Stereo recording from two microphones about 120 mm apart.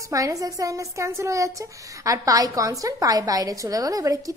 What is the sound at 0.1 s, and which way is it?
A child's voice, 30° right (ahead or behind).